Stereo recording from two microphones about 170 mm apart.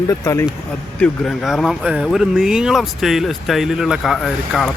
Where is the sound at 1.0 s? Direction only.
Centre (ahead or behind).